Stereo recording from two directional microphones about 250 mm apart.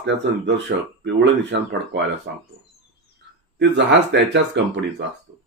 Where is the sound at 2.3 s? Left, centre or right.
Right.